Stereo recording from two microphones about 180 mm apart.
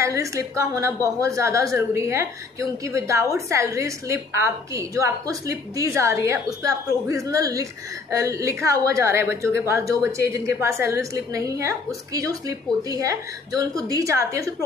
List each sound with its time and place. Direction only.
0.0 s a woman's voice: 15° right (ahead or behind)